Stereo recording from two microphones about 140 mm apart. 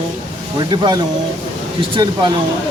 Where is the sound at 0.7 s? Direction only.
30° right (ahead or behind).